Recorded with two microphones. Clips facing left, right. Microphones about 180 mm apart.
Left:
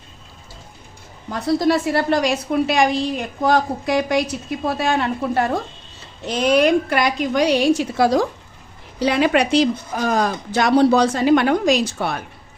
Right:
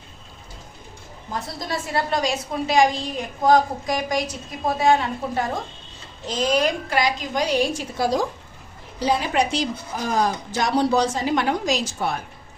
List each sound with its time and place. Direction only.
1.3 s a woman's voice: 70° left (ahead or behind)